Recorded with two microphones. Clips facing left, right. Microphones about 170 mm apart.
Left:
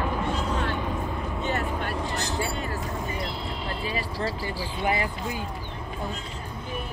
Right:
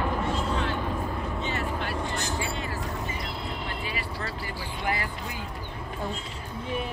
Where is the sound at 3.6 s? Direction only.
35° left (ahead or behind).